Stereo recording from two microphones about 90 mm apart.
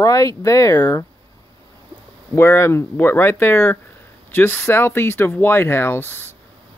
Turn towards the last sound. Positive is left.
turn(degrees=25)  # may be behind; listen again after turning